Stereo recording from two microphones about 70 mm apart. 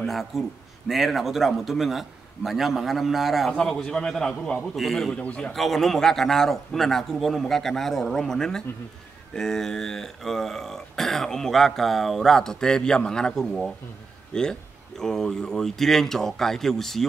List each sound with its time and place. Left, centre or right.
0.0 s a man's voice: centre
3.5 s a man's voice: centre
5.1 s speech: centre
5.5 s a man's voice: centre